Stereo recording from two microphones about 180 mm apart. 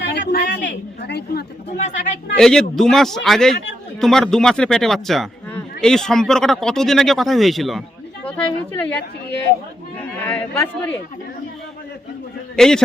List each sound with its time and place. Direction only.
0.0 s a sound: 70° left (ahead or behind)
1.7 s speech: 40° left (ahead or behind)
2.3 s speech: 5° left (ahead or behind)
8.7 s a man's voice: 10° left (ahead or behind)
10.2 s a man's voice: 10° left (ahead or behind)
12.5 s a man's voice: 5° left (ahead or behind)